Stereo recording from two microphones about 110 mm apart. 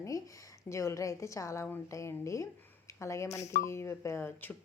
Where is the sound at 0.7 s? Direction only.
25° left (ahead or behind).